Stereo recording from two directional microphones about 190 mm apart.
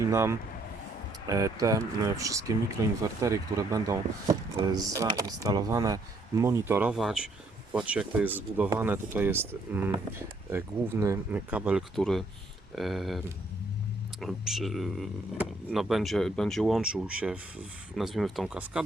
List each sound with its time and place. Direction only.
0.0 s speech: 15° right (ahead or behind)